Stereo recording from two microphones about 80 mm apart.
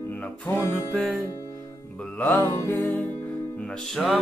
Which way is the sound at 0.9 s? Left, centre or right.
Centre.